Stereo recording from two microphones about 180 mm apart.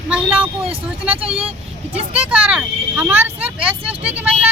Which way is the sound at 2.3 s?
5° right (ahead or behind).